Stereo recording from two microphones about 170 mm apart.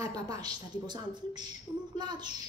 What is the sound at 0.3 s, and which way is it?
Speech, 25° right (ahead or behind).